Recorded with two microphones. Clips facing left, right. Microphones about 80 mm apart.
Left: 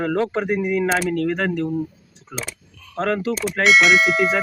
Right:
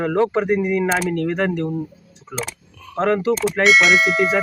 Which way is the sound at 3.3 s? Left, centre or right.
Centre.